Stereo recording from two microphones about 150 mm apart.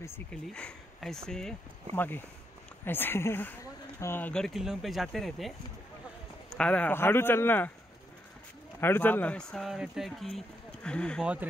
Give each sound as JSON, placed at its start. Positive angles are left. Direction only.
{"t": 0.3, "sound": "speech", "side_deg": 5}
{"t": 6.5, "sound": "speech", "side_deg": 5}
{"t": 8.8, "sound": "speech", "side_deg": 15}